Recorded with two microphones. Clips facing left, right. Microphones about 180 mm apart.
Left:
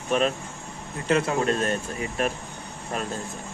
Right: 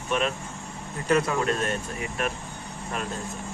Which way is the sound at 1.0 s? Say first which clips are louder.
Left 1 dB; 25° left (ahead or behind).